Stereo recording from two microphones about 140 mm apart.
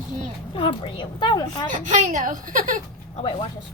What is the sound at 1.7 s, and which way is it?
A woman's voice, 65° right (ahead or behind).